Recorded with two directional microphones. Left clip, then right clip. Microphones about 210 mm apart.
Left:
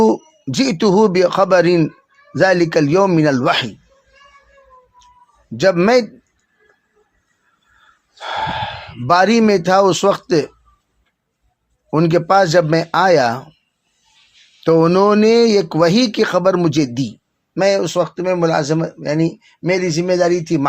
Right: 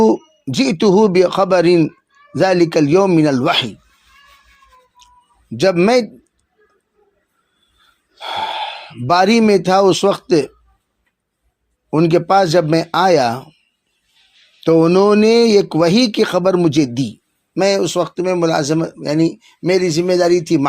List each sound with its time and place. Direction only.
0.0 s speech: 5° right (ahead or behind)
5.5 s speech: 10° right (ahead or behind)
8.2 s speech: 5° right (ahead or behind)
11.9 s speech: 5° right (ahead or behind)
14.6 s speech: 5° right (ahead or behind); by 20.7 s 20° right (ahead or behind)